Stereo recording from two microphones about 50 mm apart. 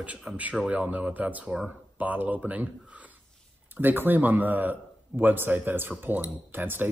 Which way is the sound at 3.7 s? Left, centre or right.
Right.